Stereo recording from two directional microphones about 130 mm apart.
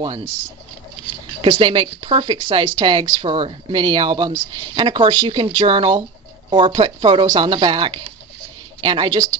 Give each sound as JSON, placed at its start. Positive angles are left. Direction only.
{"t": 1.4, "sound": "speech", "side_deg": -40}